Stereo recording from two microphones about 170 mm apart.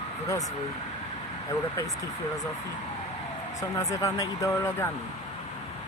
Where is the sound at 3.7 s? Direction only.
20° left (ahead or behind).